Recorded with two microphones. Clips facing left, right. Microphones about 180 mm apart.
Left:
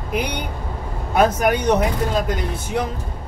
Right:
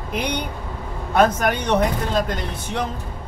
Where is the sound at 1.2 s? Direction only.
10° left (ahead or behind).